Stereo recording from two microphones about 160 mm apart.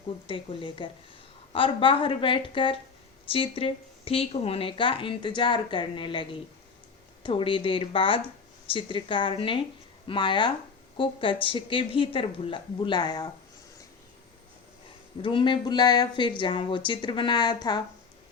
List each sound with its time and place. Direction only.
0.3 s speech: 35° left (ahead or behind)
15.2 s speech: 30° left (ahead or behind)